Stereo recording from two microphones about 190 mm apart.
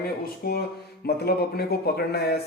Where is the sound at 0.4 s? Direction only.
50° left (ahead or behind).